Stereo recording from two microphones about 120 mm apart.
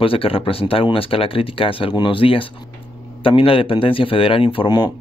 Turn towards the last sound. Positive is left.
turn(degrees=40)  # may be behind; listen again after turning